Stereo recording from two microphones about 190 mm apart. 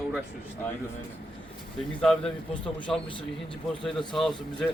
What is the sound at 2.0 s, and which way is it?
Speech, 5° left (ahead or behind).